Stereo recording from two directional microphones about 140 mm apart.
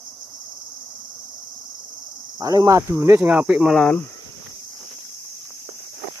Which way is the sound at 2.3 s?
25° right (ahead or behind).